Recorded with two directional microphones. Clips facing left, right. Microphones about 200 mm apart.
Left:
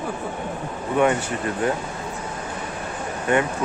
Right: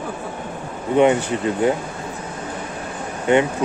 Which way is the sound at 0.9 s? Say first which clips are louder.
Right 5 dB; 20° right (ahead or behind).